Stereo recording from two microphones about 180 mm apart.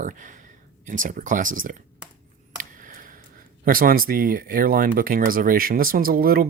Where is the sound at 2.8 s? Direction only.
50° right (ahead or behind).